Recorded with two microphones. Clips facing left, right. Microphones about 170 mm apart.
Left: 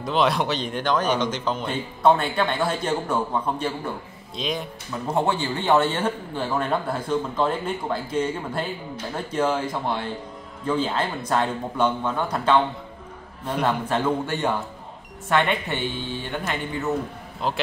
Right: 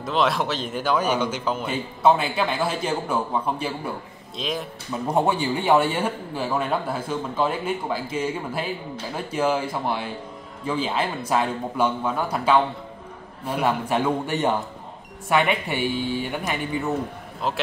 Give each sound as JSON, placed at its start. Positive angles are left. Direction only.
{"t": 0.0, "sound": "speech", "side_deg": 0}
{"t": 5.0, "sound": "speech", "side_deg": -15}